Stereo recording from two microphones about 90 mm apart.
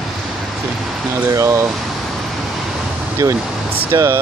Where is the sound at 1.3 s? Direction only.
35° right (ahead or behind).